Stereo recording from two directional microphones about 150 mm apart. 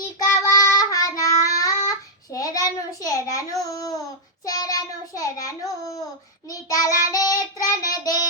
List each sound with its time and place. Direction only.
0.2 s child singing: 25° left (ahead or behind)